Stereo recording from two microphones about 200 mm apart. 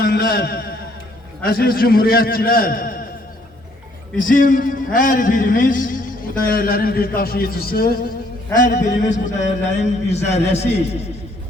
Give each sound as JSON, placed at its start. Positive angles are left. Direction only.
{"t": 0.0, "sound": "a man's voice", "side_deg": 50}
{"t": 4.3, "sound": "a man's voice", "side_deg": 45}